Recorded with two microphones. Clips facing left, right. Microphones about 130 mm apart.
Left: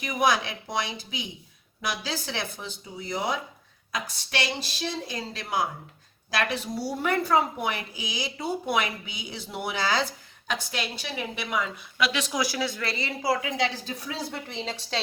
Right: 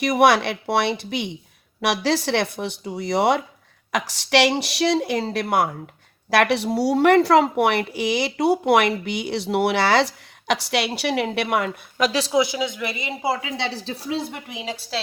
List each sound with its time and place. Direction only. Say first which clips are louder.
0.0 s a woman's voice: right 8 dB; 75° right (ahead or behind)
11.9 s a woman's voice: right 7 dB; 40° right (ahead or behind); by 15.0 s 5° right (ahead or behind)